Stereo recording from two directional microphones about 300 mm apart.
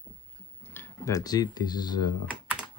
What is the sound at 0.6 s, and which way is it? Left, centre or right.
Speech, centre.